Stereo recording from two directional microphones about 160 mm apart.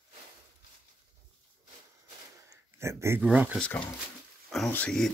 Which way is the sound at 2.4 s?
15° right (ahead or behind).